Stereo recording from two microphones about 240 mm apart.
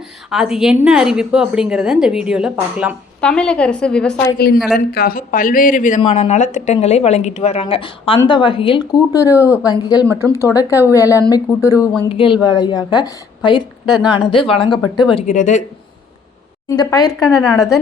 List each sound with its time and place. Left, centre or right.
0.3 s a woman's voice: centre
4.4 s speech: left
16.6 s speech: centre